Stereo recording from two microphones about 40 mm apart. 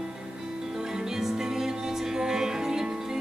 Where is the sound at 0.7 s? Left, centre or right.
Centre.